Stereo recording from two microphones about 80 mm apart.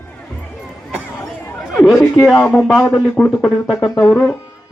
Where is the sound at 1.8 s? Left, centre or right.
Centre.